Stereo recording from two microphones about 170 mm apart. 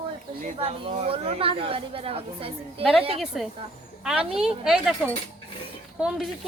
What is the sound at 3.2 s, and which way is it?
Speech, centre (ahead or behind).